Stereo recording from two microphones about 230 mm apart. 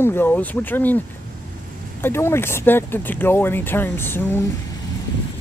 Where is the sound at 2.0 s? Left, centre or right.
Centre.